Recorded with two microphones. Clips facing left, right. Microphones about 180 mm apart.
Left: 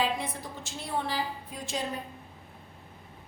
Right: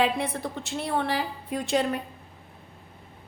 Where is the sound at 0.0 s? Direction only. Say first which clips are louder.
Right 5 dB; 65° right (ahead or behind).